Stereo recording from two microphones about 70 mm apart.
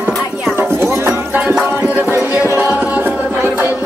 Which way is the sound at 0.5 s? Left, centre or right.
Right.